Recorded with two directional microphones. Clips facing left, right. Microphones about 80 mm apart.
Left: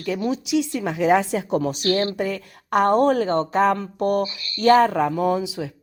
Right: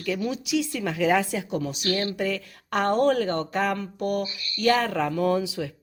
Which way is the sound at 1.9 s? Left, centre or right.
Left.